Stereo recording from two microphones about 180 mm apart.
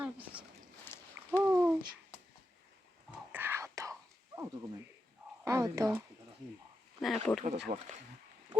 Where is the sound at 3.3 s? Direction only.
10° right (ahead or behind).